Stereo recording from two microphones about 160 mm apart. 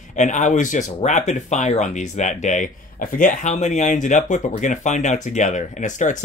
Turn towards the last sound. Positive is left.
turn(degrees=50)  # may be behind; listen again after turning